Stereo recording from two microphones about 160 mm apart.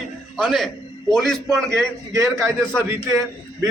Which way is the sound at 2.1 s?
20° right (ahead or behind).